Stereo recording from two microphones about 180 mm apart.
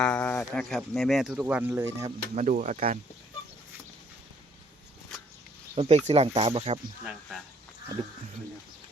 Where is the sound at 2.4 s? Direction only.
45° right (ahead or behind).